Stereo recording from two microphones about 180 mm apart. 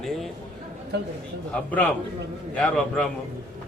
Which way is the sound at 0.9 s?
70° right (ahead or behind).